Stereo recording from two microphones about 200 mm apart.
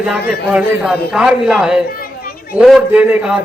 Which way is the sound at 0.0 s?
5° right (ahead or behind).